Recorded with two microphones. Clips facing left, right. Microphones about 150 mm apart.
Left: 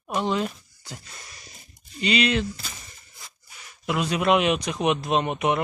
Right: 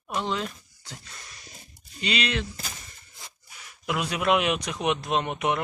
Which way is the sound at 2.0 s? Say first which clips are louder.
Left 6 dB; 5° left (ahead or behind).